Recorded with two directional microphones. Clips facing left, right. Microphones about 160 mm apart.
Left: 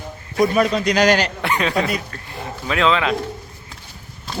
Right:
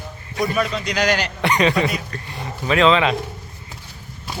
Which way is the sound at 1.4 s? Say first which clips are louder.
Right 2 dB; centre (ahead or behind).